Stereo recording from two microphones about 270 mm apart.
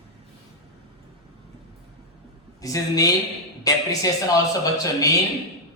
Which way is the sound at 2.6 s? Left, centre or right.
Centre.